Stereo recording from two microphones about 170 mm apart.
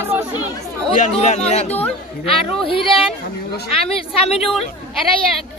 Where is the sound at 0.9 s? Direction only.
45° left (ahead or behind).